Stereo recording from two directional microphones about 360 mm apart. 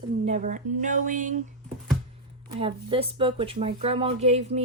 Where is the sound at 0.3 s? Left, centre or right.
Centre.